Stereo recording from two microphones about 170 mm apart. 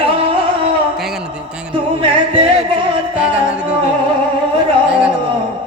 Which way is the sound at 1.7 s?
30° right (ahead or behind).